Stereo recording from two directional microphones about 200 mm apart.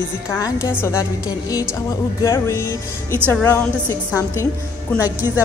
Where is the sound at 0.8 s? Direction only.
15° left (ahead or behind).